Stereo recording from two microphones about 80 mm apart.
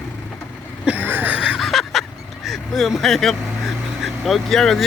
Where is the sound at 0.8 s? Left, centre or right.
Right.